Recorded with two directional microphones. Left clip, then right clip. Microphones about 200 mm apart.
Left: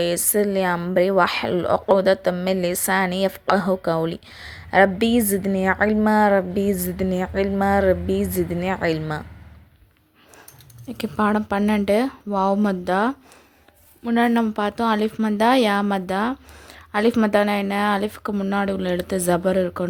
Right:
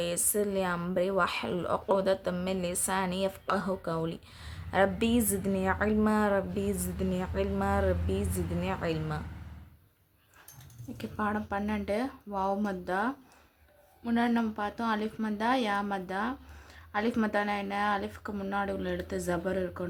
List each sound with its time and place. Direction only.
0.0 s a woman's voice: 30° left (ahead or behind)
10.9 s speech: 50° left (ahead or behind)
14.0 s speech: 35° left (ahead or behind)